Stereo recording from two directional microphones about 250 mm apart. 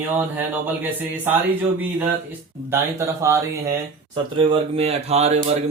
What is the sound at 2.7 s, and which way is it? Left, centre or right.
Speech, centre.